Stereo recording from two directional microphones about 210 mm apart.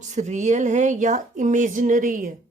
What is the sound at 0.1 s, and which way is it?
A woman's voice, 35° right (ahead or behind).